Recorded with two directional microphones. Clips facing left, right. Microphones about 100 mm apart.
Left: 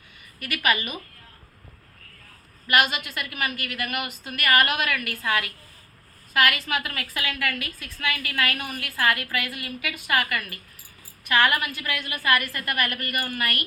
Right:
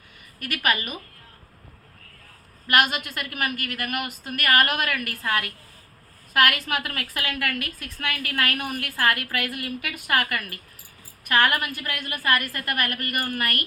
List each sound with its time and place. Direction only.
0.3 s a woman's voice: 45° right (ahead or behind)
2.6 s a woman's voice: 50° right (ahead or behind)